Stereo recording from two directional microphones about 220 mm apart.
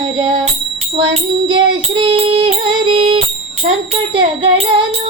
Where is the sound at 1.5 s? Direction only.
25° right (ahead or behind).